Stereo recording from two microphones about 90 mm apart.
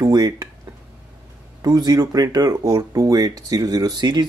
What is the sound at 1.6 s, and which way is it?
Speech, 45° right (ahead or behind).